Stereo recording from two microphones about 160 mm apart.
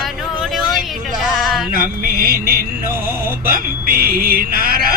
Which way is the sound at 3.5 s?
65° right (ahead or behind).